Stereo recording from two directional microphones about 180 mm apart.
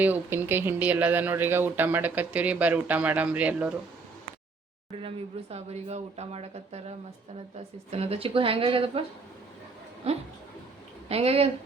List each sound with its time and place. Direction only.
0.0 s speech: 10° right (ahead or behind)
4.9 s speech: 35° right (ahead or behind)
11.1 s speech: 35° right (ahead or behind)